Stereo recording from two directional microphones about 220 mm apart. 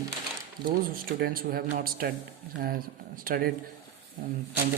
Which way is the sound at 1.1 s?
45° right (ahead or behind).